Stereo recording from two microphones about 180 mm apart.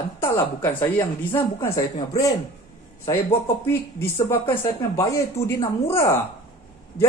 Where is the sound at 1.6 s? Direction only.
20° left (ahead or behind).